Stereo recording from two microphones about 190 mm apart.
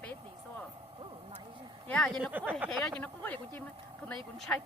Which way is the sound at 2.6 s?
10° right (ahead or behind).